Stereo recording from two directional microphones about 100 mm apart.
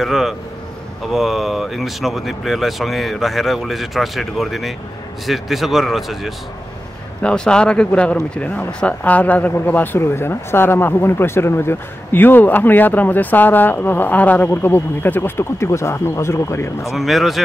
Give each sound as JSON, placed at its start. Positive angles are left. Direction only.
{"t": 0.0, "sound": "speech", "side_deg": 0}
{"t": 16.9, "sound": "speech", "side_deg": 0}